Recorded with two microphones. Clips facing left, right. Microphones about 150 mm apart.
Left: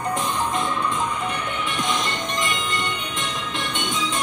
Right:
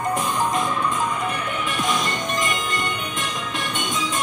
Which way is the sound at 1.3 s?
25° left (ahead or behind).